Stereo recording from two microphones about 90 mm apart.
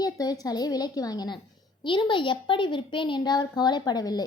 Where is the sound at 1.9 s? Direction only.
60° left (ahead or behind).